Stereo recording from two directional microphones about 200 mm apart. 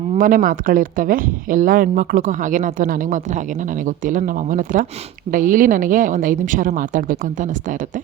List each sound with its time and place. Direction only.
0.2 s speech: 45° right (ahead or behind)